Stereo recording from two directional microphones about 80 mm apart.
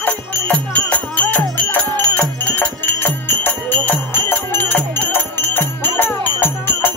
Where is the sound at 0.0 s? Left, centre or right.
Centre.